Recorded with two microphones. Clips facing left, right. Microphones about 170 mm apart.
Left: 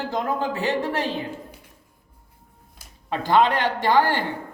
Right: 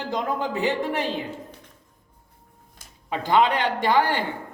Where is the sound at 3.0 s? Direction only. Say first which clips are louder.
Left 1 dB; 20° right (ahead or behind).